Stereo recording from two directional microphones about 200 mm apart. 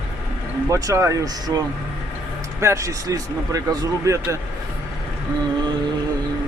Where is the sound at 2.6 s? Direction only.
15° right (ahead or behind).